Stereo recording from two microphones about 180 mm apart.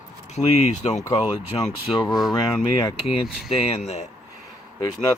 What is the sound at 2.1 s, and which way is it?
Speech, centre (ahead or behind).